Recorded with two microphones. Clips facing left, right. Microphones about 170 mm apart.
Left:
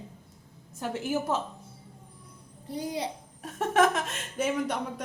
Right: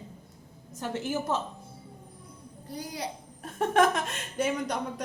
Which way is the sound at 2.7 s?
25° left (ahead or behind).